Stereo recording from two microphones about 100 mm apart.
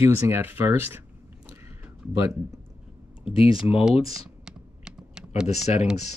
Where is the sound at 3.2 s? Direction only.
70° left (ahead or behind).